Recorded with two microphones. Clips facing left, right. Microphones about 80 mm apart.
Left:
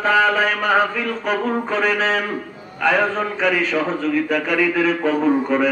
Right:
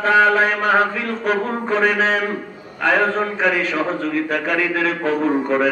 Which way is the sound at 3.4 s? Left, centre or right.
Centre.